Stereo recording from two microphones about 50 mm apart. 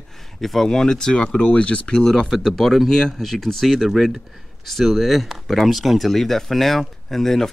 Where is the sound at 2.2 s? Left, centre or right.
Centre.